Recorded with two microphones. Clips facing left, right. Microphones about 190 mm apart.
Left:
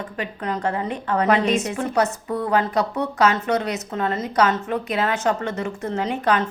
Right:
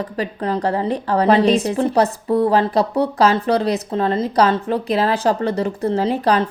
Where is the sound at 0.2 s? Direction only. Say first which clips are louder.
Right 5 dB; 35° right (ahead or behind).